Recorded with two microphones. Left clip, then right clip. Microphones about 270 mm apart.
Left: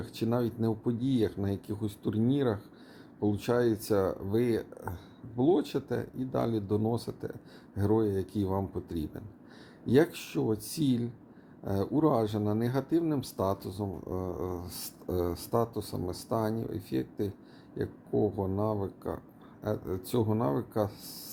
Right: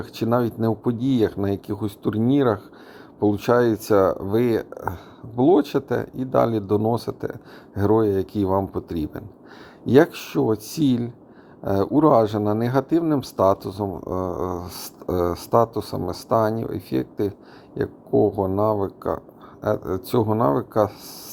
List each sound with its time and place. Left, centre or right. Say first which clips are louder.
0.0 s speech: right 9 dB; centre